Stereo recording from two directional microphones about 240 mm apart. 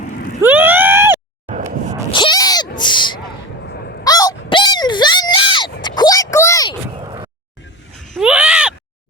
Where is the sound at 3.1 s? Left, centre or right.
Left.